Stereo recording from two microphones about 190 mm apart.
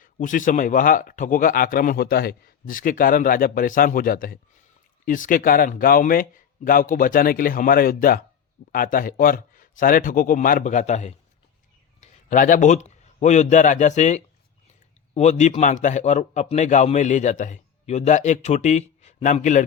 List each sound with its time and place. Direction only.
0.0 s a man's voice: 45° left (ahead or behind)